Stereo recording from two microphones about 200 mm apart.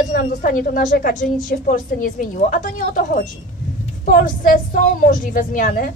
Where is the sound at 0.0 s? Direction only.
40° left (ahead or behind).